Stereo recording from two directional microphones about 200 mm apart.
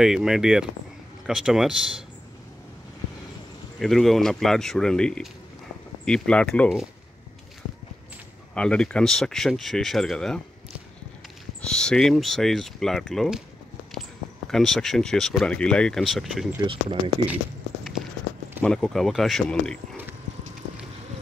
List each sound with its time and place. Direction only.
0.0 s speech: centre (ahead or behind)
3.8 s speech: centre (ahead or behind)
8.5 s speech: 5° left (ahead or behind)
11.6 s speech: 5° left (ahead or behind)
14.5 s speech: centre (ahead or behind)
16.5 s speech: 25° right (ahead or behind)
18.6 s speech: 5° left (ahead or behind)